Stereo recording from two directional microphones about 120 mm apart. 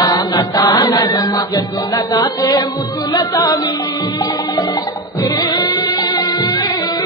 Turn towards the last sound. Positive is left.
turn(degrees=35)  # may be behind; listen again after turning